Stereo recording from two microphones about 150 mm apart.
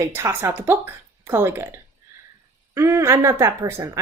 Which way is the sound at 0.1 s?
15° right (ahead or behind).